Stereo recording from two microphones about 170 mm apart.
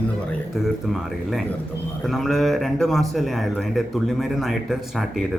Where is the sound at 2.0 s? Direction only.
Centre (ahead or behind).